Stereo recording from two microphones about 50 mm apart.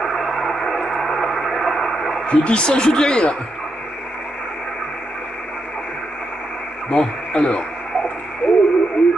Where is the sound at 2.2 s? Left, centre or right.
Left.